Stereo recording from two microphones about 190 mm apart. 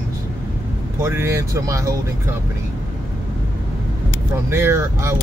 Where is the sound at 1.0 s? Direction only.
15° right (ahead or behind).